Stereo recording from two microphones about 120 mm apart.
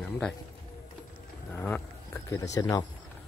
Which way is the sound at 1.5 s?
20° left (ahead or behind).